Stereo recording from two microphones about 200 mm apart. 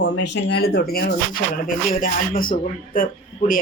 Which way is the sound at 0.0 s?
55° left (ahead or behind).